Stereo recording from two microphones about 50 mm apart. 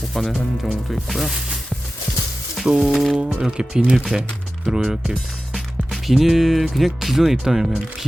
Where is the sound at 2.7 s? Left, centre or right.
Centre.